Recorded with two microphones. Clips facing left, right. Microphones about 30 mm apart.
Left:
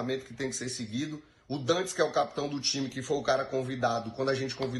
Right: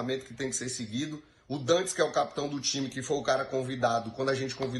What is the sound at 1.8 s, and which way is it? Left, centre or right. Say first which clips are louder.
Speech: even; right.